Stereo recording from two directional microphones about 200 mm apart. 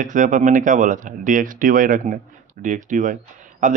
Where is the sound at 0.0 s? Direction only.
40° right (ahead or behind).